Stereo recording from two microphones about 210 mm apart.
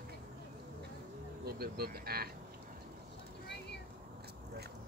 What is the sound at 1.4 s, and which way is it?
Speech, 50° right (ahead or behind).